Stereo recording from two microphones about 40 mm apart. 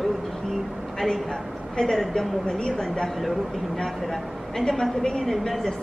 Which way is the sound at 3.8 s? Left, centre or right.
Centre.